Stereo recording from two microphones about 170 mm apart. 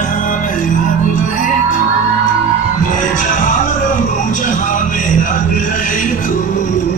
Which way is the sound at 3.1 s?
50° left (ahead or behind).